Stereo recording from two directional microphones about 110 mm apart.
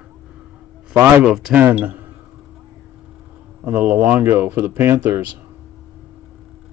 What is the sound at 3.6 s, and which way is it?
Speech, 15° right (ahead or behind).